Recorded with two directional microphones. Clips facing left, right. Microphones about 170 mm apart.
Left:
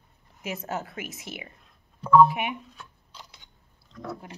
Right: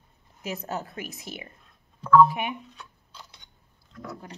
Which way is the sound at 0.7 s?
35° right (ahead or behind).